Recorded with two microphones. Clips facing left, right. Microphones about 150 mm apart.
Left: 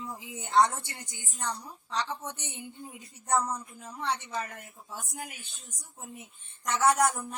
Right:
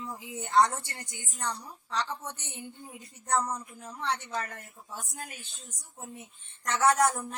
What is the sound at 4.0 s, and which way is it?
A woman's voice, 15° left (ahead or behind).